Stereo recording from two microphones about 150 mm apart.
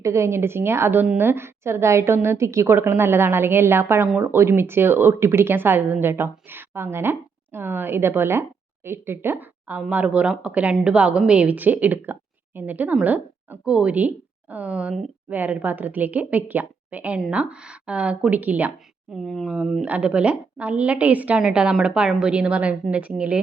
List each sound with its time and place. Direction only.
0.0 s a woman's voice: 20° right (ahead or behind)
19.1 s a woman's voice: centre (ahead or behind)